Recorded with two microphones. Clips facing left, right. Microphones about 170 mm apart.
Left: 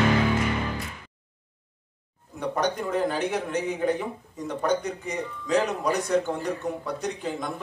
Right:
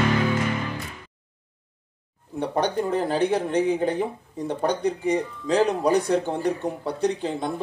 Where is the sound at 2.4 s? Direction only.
30° right (ahead or behind).